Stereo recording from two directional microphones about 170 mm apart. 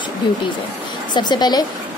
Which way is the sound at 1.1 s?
25° left (ahead or behind).